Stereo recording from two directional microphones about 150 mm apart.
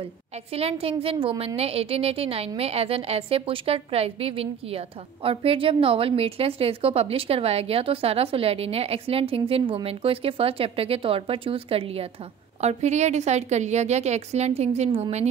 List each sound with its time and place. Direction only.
0.5 s a woman's voice: 40° right (ahead or behind)